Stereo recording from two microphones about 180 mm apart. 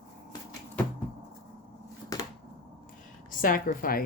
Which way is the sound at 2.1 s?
20° left (ahead or behind).